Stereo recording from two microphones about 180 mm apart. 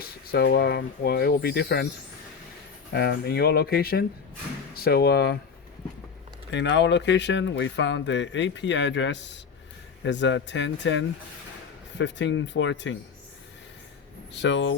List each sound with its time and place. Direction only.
0.0 s speech: 60° left (ahead or behind)
2.9 s speech: 65° left (ahead or behind)
6.5 s speech: 80° left
14.3 s speech: 80° left